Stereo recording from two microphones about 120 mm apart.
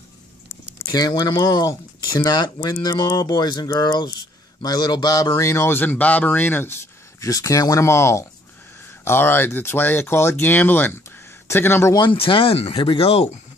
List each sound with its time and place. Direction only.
0.7 s speech: 35° left (ahead or behind); by 6.7 s 15° left (ahead or behind)
7.2 s speech: 30° left (ahead or behind)
11.9 s speech: 40° left (ahead or behind)